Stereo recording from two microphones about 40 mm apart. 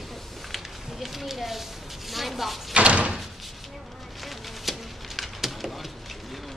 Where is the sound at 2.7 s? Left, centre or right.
Right.